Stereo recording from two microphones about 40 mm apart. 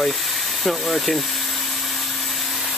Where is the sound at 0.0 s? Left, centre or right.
Centre.